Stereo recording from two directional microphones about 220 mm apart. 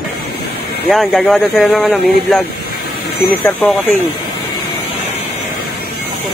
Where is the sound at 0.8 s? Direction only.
Centre (ahead or behind).